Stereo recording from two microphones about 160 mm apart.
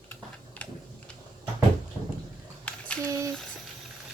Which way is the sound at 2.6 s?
10° left (ahead or behind).